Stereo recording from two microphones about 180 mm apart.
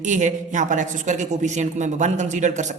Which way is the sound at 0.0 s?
40° right (ahead or behind).